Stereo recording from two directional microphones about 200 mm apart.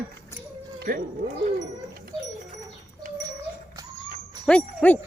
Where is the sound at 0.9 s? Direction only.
45° right (ahead or behind).